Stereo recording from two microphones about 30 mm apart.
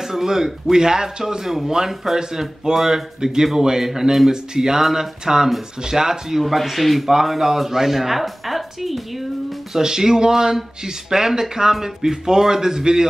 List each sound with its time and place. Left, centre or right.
0.0 s a woman's voice: centre
6.4 s a woman's voice: centre
9.8 s a woman's voice: centre